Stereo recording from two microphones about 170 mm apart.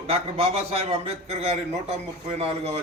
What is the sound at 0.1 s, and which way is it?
A man's voice, 35° right (ahead or behind).